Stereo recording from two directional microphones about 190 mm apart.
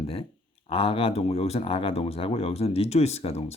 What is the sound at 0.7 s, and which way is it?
Speech, 30° left (ahead or behind).